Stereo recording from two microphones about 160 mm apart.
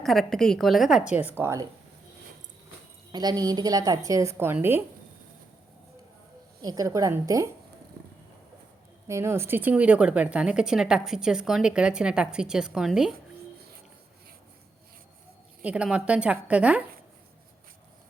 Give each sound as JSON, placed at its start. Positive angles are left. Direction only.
{"t": 0.0, "sound": "a woman's voice", "side_deg": 0}
{"t": 3.1, "sound": "a woman's voice", "side_deg": -25}
{"t": 6.6, "sound": "a woman's voice", "side_deg": -20}
{"t": 9.0, "sound": "a woman's voice", "side_deg": -15}
{"t": 15.6, "sound": "a woman's voice", "side_deg": -5}